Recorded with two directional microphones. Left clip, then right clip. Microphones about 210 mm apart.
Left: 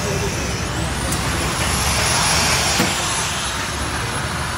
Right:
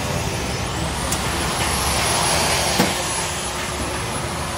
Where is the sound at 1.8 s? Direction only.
45° right (ahead or behind).